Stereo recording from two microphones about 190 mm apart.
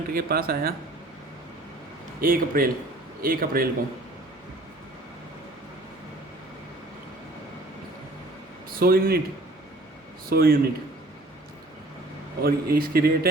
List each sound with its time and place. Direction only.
0.1 s a man's voice: 50° right (ahead or behind)
2.2 s a man's voice: 50° right (ahead or behind)
8.7 s a man's voice: 50° right (ahead or behind)
10.2 s a man's voice: 50° right (ahead or behind)
12.4 s a man's voice: 55° right (ahead or behind)